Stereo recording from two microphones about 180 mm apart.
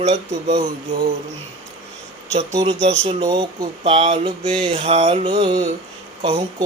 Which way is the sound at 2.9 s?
40° right (ahead or behind).